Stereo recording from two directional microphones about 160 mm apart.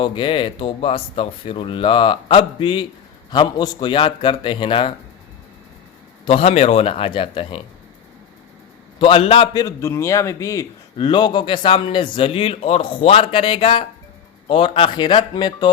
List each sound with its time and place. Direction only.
0.0 s a man's voice: 30° left (ahead or behind)
6.2 s a man's voice: 35° left (ahead or behind)
9.0 s a man's voice: 35° left (ahead or behind)
9.5 s a man's voice: 25° left (ahead or behind)